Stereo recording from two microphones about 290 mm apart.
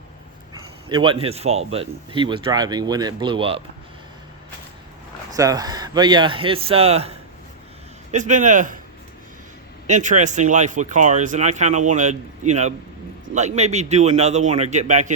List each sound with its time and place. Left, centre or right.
0.9 s speech: centre
5.3 s speech: centre
9.8 s speech: right